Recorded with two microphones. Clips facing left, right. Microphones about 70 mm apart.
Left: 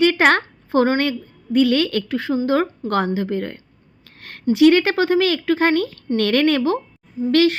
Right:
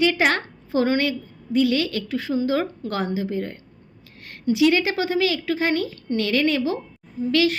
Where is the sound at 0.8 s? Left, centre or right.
Left.